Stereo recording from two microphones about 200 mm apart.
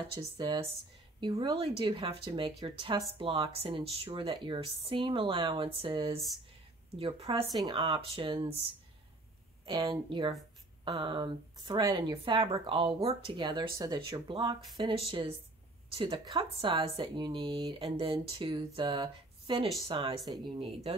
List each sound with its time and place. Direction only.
0.2 s speech: 20° right (ahead or behind)
9.7 s speech: 25° right (ahead or behind)